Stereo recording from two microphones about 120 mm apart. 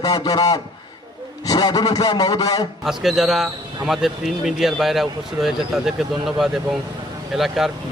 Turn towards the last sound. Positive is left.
turn(degrees=0)  # may be behind; listen again after turning